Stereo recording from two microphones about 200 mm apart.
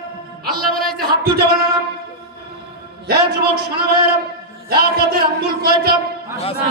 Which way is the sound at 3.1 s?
50° right (ahead or behind).